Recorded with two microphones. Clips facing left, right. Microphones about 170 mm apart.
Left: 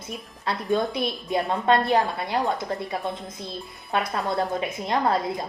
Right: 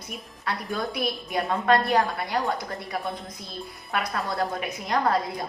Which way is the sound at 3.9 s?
25° left (ahead or behind).